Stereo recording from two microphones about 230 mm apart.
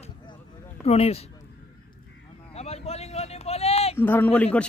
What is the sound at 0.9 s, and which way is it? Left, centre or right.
Speech, left.